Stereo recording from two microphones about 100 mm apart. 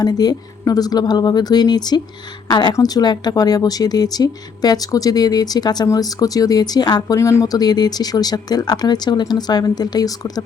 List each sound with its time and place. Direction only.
0.0 s speech: 40° left (ahead or behind)
7.2 s speech: 30° left (ahead or behind)